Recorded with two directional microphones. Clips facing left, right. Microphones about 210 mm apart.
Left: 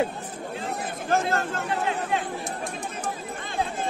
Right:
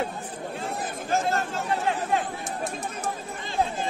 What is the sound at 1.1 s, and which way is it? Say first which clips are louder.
Chatter: left 1 dB; 55° left (ahead or behind).